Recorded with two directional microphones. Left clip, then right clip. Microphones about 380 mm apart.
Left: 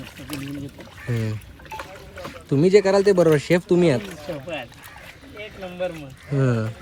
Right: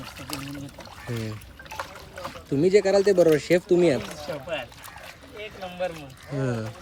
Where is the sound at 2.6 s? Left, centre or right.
Centre.